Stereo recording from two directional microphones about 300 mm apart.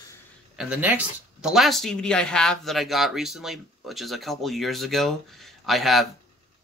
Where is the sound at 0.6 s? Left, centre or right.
Centre.